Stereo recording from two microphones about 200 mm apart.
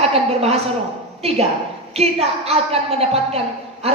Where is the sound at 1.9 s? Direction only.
30° right (ahead or behind).